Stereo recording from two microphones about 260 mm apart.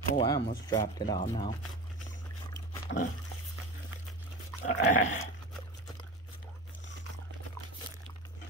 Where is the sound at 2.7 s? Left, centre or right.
Left.